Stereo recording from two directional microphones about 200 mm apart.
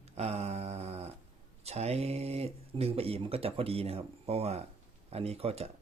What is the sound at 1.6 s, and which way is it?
Speech, 30° right (ahead or behind).